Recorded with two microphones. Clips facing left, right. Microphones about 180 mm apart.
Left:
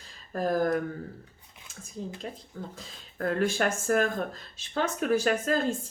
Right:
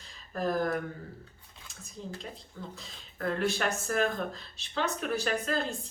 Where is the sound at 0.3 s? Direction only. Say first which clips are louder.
Left 4 dB; 45° left (ahead or behind).